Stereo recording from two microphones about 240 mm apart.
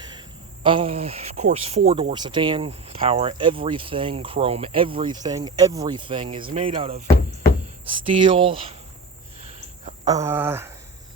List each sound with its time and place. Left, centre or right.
0.6 s speech: right
8.0 s speech: right
10.1 s speech: centre